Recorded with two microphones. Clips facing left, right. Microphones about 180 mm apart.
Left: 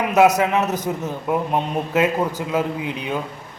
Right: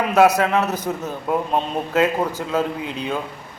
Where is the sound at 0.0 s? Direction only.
20° left (ahead or behind).